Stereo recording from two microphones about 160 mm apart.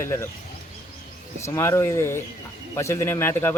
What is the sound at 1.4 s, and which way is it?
Speech, 15° left (ahead or behind).